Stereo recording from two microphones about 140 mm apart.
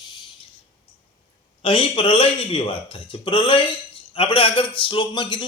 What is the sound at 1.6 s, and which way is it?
A man's voice, 40° left (ahead or behind).